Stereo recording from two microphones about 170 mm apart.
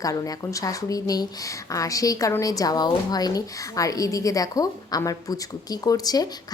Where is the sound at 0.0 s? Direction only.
20° left (ahead or behind).